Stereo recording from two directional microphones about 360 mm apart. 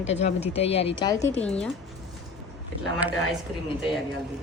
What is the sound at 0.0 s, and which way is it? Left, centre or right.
A woman's voice, centre.